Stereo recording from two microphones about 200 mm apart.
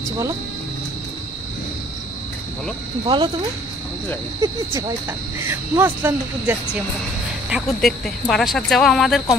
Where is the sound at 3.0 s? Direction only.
25° right (ahead or behind).